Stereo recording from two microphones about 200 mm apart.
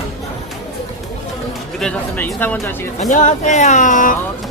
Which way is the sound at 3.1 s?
35° left (ahead or behind).